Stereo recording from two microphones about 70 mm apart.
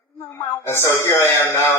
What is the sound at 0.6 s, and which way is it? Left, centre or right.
Speech, left.